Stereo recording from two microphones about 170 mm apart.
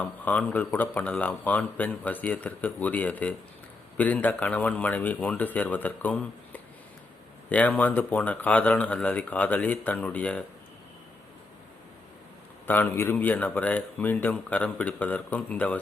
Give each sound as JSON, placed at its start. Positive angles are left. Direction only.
{"t": 0.0, "sound": "speech", "side_deg": 10}
{"t": 12.6, "sound": "speech", "side_deg": 10}